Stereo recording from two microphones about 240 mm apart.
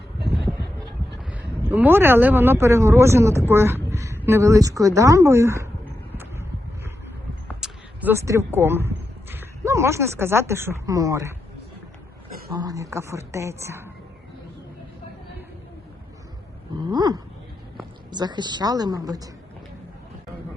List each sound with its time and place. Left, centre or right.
1.7 s speech: centre
7.4 s speech: centre
12.5 s speech: centre
16.9 s speech: centre